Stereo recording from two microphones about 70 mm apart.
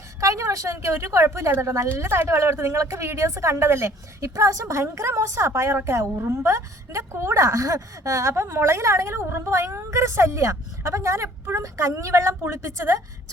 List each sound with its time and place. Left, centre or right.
0.2 s a woman's voice: right